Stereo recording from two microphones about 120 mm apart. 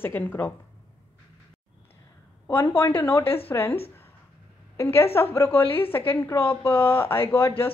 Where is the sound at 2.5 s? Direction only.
20° left (ahead or behind).